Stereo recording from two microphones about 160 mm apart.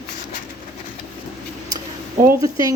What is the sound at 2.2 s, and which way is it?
Speech, 20° right (ahead or behind).